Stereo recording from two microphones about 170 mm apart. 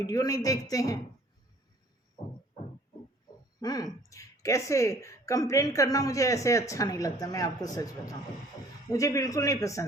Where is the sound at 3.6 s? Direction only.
20° left (ahead or behind).